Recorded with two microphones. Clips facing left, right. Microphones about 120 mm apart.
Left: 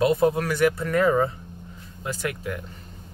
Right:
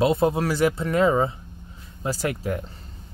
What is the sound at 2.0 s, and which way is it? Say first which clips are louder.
Speech: right 3 dB; 35° right (ahead or behind).